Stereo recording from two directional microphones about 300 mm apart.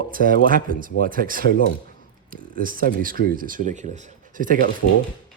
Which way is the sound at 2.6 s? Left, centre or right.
Right.